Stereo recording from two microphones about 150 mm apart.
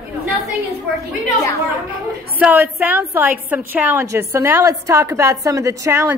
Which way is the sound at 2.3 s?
10° right (ahead or behind).